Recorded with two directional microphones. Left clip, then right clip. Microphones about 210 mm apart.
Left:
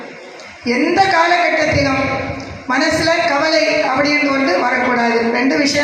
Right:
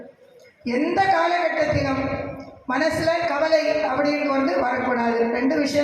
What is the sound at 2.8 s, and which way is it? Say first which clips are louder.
Music: left 6 dB; 55° right (ahead or behind).